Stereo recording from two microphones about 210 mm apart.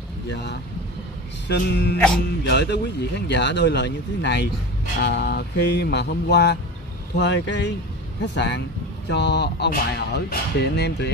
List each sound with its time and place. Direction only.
0.3 s speech: 55° left (ahead or behind)